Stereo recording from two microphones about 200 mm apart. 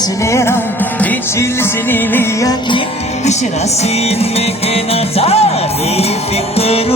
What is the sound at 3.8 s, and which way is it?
Music, 30° left (ahead or behind).